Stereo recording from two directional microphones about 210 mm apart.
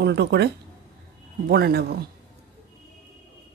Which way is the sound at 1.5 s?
50° right (ahead or behind).